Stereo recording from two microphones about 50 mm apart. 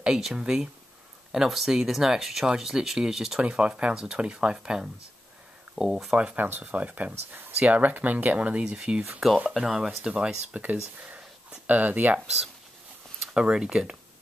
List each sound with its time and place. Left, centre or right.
0.0 s speech: centre
3.4 s speech: right
6.3 s speech: right
8.7 s speech: centre
10.6 s speech: right
13.3 s speech: centre